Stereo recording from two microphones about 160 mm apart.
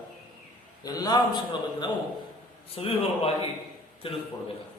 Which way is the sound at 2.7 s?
40° left (ahead or behind).